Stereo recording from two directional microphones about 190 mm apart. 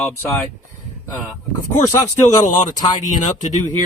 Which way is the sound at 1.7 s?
15° left (ahead or behind).